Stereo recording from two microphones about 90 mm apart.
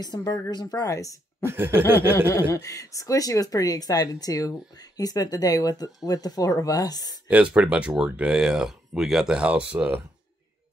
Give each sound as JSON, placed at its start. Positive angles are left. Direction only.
{"t": 0.0, "sound": "speech", "side_deg": 45}
{"t": 1.4, "sound": "a sound", "side_deg": -25}
{"t": 2.5, "sound": "speech", "side_deg": 35}
{"t": 7.2, "sound": "speech", "side_deg": -15}